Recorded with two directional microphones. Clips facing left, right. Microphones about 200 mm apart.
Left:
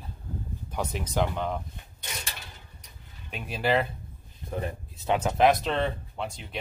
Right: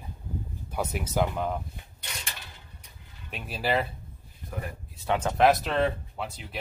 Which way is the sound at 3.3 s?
5° right (ahead or behind).